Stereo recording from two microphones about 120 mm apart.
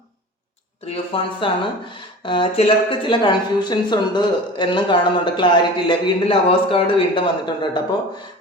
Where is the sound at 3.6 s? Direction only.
40° left (ahead or behind).